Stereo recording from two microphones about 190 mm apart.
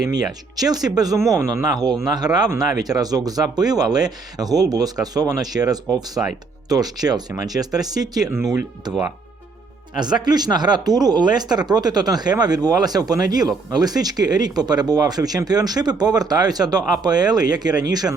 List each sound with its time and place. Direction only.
0.1 s speech: 20° right (ahead or behind)
5.9 s speech: centre (ahead or behind)
6.7 s speech: 20° right (ahead or behind)
10.2 s speech: 20° right (ahead or behind)